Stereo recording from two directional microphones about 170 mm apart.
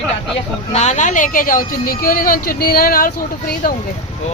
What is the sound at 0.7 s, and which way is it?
A woman's voice, 40° left (ahead or behind).